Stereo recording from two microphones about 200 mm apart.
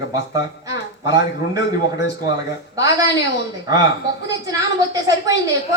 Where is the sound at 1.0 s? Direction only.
20° right (ahead or behind).